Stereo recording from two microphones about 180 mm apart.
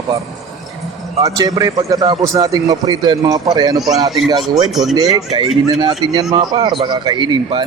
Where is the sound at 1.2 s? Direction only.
20° right (ahead or behind).